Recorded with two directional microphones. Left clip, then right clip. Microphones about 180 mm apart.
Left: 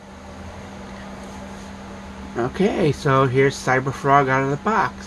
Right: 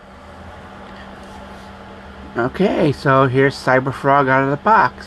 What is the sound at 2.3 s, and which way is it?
Speech, 35° right (ahead or behind).